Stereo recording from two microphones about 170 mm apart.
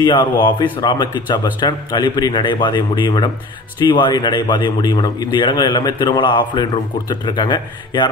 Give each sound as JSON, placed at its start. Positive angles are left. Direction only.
{"t": 0.0, "sound": "a man's voice", "side_deg": 25}